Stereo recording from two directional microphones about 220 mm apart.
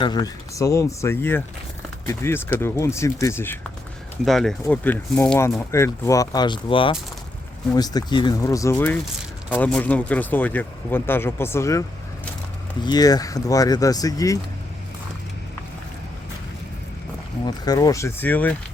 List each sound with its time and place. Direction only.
0.0 s speech: 20° left (ahead or behind)
17.4 s speech: 15° left (ahead or behind)